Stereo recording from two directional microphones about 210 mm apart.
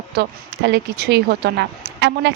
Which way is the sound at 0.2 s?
50° right (ahead or behind).